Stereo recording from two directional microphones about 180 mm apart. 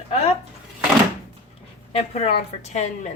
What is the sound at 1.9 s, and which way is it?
A woman's voice, 35° left (ahead or behind).